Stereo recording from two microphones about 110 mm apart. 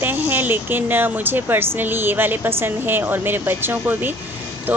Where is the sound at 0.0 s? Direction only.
20° right (ahead or behind).